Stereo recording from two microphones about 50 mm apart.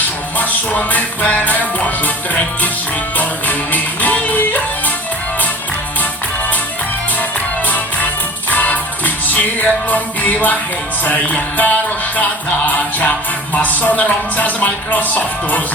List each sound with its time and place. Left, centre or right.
0.3 s music: left
3.2 s music: left
8.4 s music: left
13.5 s speech: left